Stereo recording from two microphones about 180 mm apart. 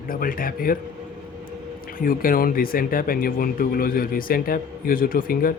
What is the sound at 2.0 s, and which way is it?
Speech, 50° left (ahead or behind).